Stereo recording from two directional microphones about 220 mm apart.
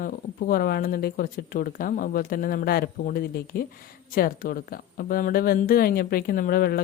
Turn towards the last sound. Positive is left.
turn(degrees=45)  # may be behind; listen again after turning